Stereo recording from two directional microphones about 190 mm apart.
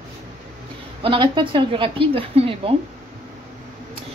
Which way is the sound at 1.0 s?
25° right (ahead or behind).